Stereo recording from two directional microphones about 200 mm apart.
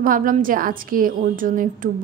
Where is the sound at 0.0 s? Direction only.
45° right (ahead or behind).